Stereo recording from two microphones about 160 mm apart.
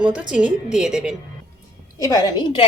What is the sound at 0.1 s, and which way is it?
A woman's voice, 10° right (ahead or behind).